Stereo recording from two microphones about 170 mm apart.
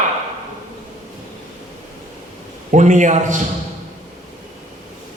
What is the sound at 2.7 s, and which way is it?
Speech, 45° right (ahead or behind).